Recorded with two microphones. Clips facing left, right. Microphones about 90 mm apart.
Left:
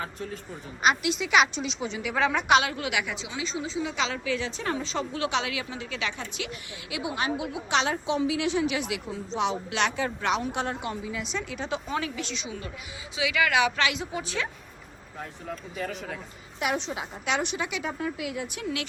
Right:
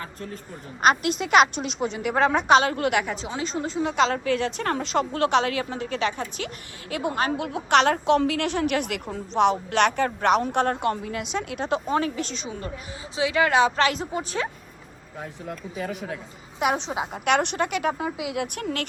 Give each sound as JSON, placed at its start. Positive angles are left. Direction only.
{"t": 0.8, "sound": "a woman's voice", "side_deg": -45}
{"t": 2.7, "sound": "a woman's voice", "side_deg": -50}
{"t": 15.2, "sound": "speech", "side_deg": -10}
{"t": 16.6, "sound": "a woman's voice", "side_deg": -90}
{"t": 18.5, "sound": "a woman's voice", "side_deg": -50}